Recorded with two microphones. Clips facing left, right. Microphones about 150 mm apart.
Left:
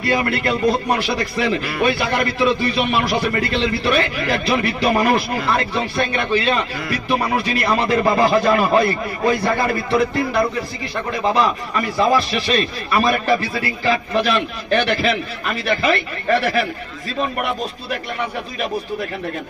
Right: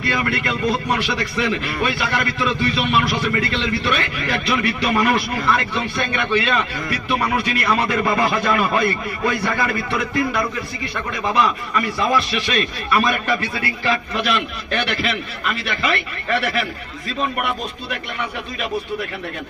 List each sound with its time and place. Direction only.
0.0 s a man's voice: 35° left (ahead or behind)